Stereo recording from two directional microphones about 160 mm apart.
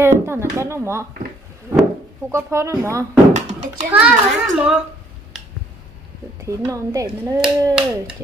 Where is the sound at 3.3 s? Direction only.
50° right (ahead or behind).